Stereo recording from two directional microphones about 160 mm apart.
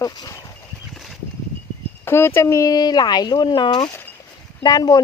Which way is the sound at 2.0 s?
15° left (ahead or behind).